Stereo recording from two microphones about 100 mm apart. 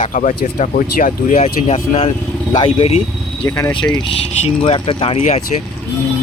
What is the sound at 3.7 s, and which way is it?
Speech, 50° left (ahead or behind).